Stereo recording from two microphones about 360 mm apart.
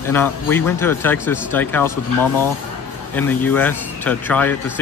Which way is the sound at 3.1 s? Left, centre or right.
Centre.